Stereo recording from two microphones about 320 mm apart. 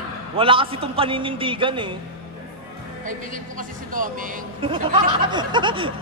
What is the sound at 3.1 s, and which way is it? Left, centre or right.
Speech, right.